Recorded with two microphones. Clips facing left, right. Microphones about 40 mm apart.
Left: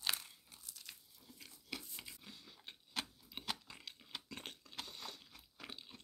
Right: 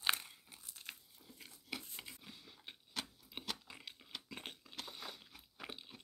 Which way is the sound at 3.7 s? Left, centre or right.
Centre.